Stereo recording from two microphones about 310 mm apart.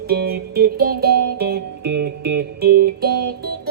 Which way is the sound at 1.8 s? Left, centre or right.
Right.